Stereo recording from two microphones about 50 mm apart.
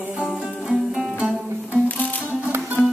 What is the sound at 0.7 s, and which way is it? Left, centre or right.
Music, centre.